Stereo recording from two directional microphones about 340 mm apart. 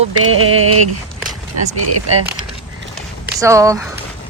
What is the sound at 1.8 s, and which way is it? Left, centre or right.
Speech, right.